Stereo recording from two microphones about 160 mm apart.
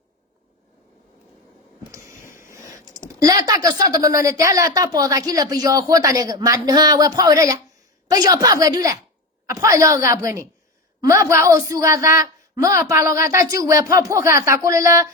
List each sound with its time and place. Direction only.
1.9 s a woman's voice: 20° right (ahead or behind)